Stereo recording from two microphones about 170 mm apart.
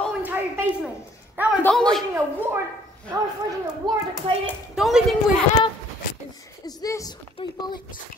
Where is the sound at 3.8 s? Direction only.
25° right (ahead or behind).